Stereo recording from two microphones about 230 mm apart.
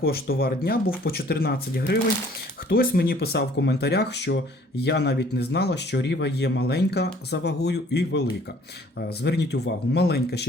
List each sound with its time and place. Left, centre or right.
0.0 s speech: left